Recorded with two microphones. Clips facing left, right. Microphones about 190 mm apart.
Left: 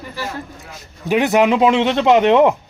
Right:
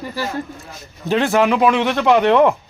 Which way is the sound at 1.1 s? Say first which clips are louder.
Left 1 dB; 15° left (ahead or behind).